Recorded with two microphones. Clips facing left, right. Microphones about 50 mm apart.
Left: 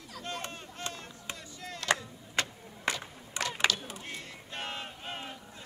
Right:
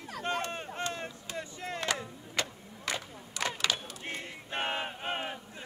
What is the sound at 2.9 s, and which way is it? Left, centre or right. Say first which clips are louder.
Whip: right 1 dB; right.